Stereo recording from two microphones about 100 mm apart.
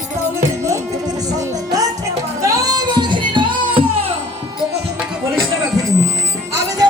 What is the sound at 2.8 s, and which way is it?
Music, 50° right (ahead or behind).